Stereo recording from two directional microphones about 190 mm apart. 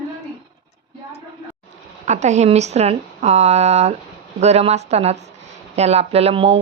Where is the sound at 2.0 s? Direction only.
35° right (ahead or behind).